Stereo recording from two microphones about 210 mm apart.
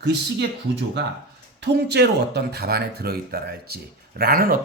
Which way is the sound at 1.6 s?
55° right (ahead or behind).